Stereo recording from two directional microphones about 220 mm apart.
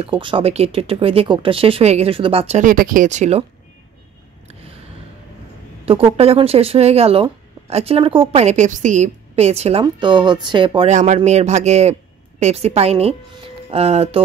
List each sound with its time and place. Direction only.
0.0 s a woman's voice: 25° right (ahead or behind)
5.9 s a woman's voice: 25° right (ahead or behind)